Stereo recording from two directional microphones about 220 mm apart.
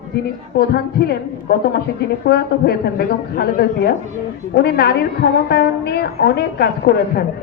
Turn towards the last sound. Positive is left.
turn(degrees=45)  # may be behind; listen again after turning